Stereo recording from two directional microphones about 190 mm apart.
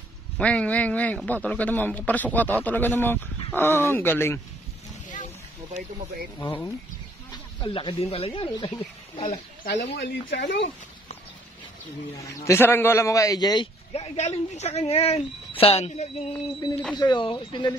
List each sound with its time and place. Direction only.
0.4 s a man's voice: 5° left (ahead or behind)
6.4 s a man's voice: 10° left (ahead or behind)
7.6 s speech: 25° left (ahead or behind)
9.7 s speech: 55° left (ahead or behind); by 10.7 s 70° left (ahead or behind)
12.4 s a man's voice: 10° left (ahead or behind)
13.9 s speech: 35° left (ahead or behind)
16.9 s speech: 25° left (ahead or behind)